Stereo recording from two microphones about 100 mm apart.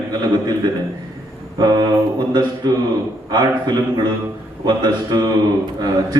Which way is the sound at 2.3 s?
45° right (ahead or behind).